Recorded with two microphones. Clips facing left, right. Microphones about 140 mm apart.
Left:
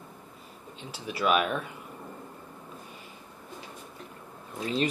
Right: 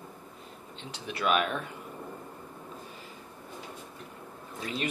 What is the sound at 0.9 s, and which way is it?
Speech, centre (ahead or behind).